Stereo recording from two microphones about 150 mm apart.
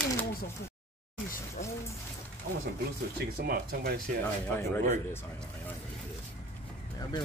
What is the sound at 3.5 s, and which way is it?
Speech, 80° right.